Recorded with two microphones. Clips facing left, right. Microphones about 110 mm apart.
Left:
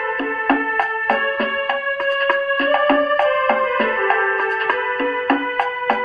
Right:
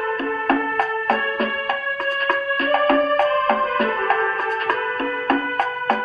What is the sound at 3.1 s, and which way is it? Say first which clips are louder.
Music: left 1 dB; 30° right (ahead or behind).